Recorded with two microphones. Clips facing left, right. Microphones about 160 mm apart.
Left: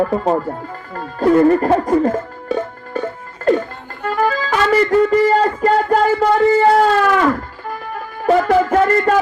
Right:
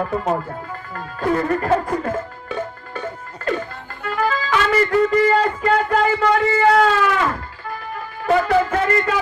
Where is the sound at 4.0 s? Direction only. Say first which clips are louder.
Left 4 dB; 45° left (ahead or behind).